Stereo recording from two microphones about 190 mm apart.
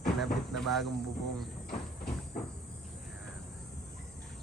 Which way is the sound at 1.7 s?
50° left (ahead or behind).